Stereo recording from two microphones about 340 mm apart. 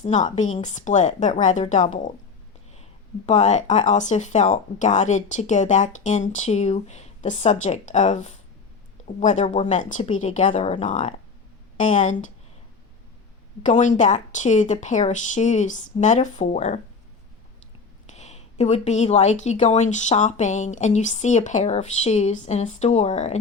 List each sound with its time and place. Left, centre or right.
0.0 s speech: left
3.2 s speech: centre
13.7 s speech: left
18.0 s speech: centre